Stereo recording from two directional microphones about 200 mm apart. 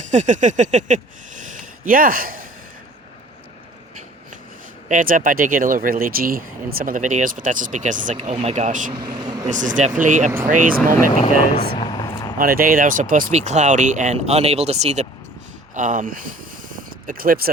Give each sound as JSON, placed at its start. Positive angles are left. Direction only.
{"t": 0.1, "sound": "speech", "side_deg": -35}
{"t": 4.9, "sound": "speech", "side_deg": -40}
{"t": 8.9, "sound": "speech", "side_deg": -20}
{"t": 9.5, "sound": "speech", "side_deg": -40}
{"t": 11.8, "sound": "a sound", "side_deg": 20}
{"t": 12.4, "sound": "speech", "side_deg": -45}